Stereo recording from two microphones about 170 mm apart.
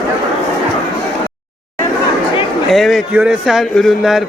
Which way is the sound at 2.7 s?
Centre (ahead or behind).